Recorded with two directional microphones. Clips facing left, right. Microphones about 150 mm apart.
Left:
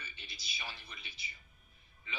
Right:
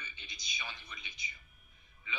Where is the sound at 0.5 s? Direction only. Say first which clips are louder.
Right 1 dB; 30° left (ahead or behind).